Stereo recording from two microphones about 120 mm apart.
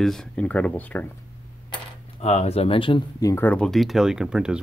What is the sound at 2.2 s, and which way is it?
Speech, 60° left (ahead or behind).